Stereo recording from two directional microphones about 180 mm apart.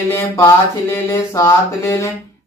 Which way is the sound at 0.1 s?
15° left (ahead or behind).